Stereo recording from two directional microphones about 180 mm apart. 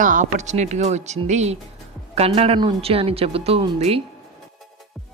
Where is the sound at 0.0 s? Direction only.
45° right (ahead or behind).